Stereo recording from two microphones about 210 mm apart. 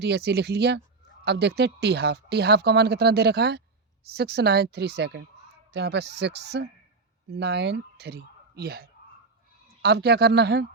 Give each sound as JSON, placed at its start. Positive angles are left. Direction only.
{"t": 0.0, "sound": "speech", "side_deg": -50}